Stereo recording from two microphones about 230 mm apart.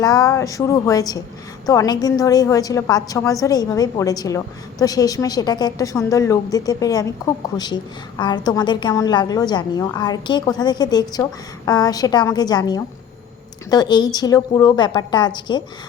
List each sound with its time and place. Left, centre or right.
0.0 s a woman's voice: centre